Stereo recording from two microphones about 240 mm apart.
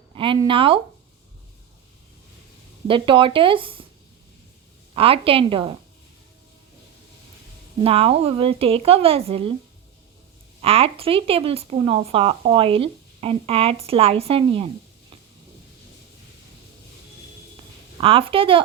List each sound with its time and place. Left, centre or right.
0.1 s speech: right
2.8 s speech: right
4.9 s speech: right
7.8 s speech: right
10.6 s speech: right
17.9 s speech: right